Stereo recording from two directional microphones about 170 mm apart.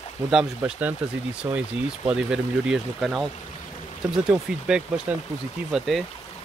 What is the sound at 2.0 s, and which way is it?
Speech, 5° right (ahead or behind).